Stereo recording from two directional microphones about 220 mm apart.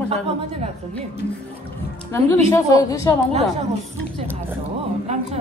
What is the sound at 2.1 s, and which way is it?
A woman's voice, 15° left (ahead or behind).